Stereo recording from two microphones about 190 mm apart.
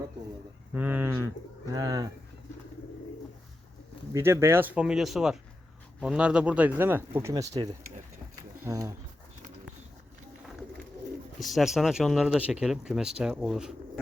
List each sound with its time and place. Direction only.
0.7 s bird: 10° right (ahead or behind)
4.1 s speech: 15° right (ahead or behind)
8.4 s a sound: 20° right (ahead or behind)
11.3 s speech: centre (ahead or behind)